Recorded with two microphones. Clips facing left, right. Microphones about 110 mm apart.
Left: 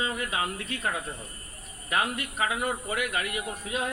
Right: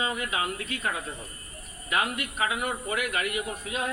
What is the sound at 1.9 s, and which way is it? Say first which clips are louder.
A man's voice: even; 30° left (ahead or behind).